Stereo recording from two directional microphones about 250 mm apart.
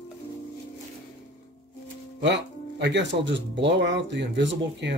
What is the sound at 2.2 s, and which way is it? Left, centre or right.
Speech, right.